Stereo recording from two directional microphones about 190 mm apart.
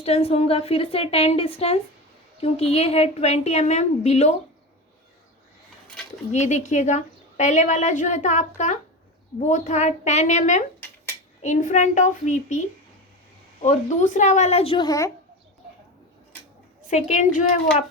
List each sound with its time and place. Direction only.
0.0 s a woman's voice: 30° left (ahead or behind)
6.3 s a woman's voice: 40° left (ahead or behind); by 15.1 s 20° left (ahead or behind)
16.9 s a woman's voice: 40° left (ahead or behind)